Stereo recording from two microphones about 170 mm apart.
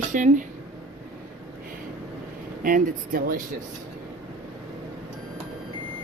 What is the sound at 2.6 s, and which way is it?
Speech, 55° right (ahead or behind).